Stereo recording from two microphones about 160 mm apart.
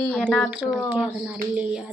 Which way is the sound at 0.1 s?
Centre (ahead or behind).